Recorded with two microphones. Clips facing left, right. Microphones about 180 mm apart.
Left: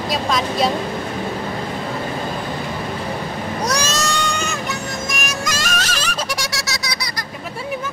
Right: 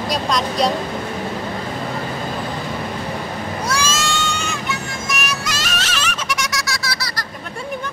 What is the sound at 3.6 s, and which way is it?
Music, 40° left (ahead or behind).